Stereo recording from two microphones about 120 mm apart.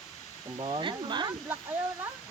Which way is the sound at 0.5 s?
45° right (ahead or behind).